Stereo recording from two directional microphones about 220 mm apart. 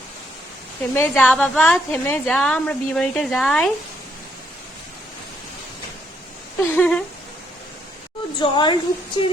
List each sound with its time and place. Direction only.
0.9 s a woman's voice: 10° left (ahead or behind)
6.6 s speech: 10° left (ahead or behind)
8.4 s speech: 20° left (ahead or behind)